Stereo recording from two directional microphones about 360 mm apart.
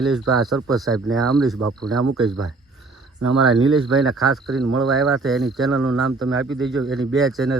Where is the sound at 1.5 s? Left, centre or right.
Right.